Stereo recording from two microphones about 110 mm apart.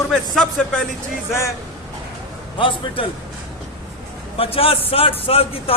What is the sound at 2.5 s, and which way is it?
Speech, 50° left (ahead or behind).